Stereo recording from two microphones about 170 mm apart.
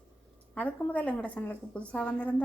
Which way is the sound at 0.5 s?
10° left (ahead or behind).